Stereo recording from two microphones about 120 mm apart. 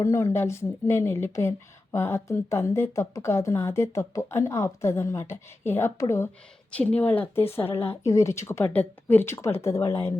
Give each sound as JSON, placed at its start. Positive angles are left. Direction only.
{"t": 0.0, "sound": "speech", "side_deg": 25}
{"t": 6.7, "sound": "a woman's voice", "side_deg": 10}